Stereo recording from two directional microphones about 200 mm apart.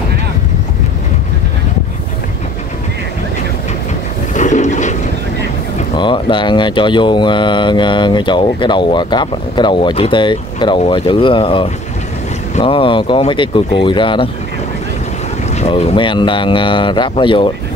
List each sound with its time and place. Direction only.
4.3 s a sound: 35° left (ahead or behind)
5.9 s speech: 25° left (ahead or behind)
15.5 s speech: 30° left (ahead or behind)